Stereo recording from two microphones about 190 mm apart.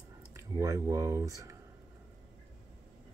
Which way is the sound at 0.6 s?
15° right (ahead or behind).